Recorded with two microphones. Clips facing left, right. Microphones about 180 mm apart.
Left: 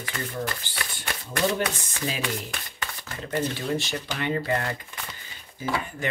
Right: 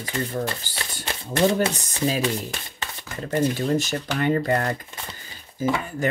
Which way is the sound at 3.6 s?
45° right (ahead or behind).